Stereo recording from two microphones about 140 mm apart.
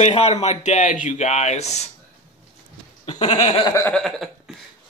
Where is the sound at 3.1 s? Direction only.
45° left (ahead or behind).